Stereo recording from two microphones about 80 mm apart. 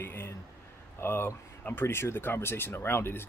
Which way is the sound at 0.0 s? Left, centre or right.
Left.